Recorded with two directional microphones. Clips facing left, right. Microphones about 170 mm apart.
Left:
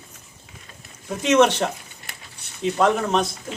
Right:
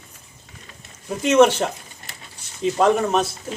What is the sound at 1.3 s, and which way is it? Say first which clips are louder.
Speech: right 2 dB; 10° right (ahead or behind).